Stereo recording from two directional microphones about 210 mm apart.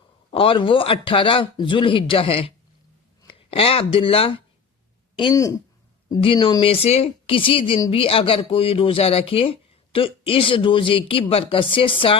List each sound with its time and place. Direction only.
0.3 s speech: 25° left (ahead or behind)